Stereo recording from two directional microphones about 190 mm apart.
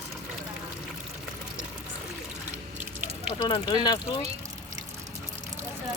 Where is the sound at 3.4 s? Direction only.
20° left (ahead or behind).